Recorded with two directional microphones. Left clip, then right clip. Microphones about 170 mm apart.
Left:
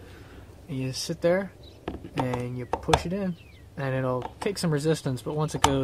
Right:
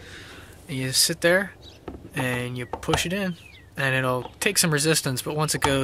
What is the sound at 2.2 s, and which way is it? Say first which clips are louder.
Speech: right 3 dB; 15° right (ahead or behind).